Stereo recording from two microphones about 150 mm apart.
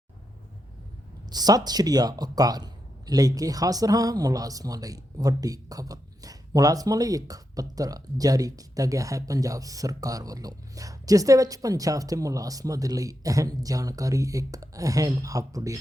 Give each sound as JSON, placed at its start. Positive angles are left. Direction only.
{"t": 1.3, "sound": "speech", "side_deg": -25}